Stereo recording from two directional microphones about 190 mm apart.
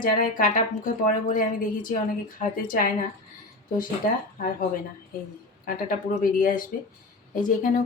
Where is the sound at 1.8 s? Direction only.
45° left (ahead or behind).